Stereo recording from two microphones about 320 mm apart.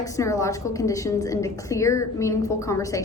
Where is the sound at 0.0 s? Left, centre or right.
Centre.